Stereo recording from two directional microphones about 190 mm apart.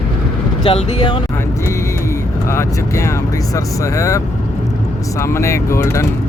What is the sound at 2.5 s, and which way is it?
Speech, 15° left (ahead or behind).